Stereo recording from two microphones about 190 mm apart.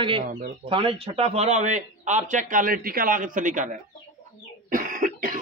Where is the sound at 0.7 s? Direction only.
30° right (ahead or behind).